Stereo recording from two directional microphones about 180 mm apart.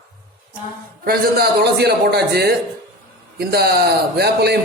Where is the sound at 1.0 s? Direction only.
60° right (ahead or behind).